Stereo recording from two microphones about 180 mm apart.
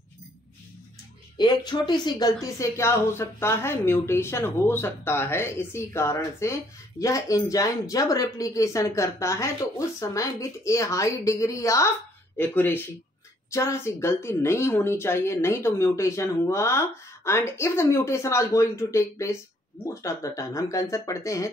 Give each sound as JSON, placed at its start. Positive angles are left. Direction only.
{"t": 1.4, "sound": "speech", "side_deg": 25}